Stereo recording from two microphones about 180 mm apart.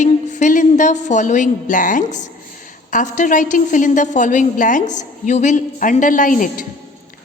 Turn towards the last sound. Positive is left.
turn(degrees=45)  # may be behind; listen again after turning